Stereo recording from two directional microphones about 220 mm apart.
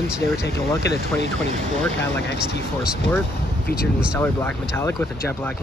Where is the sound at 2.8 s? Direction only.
5° right (ahead or behind).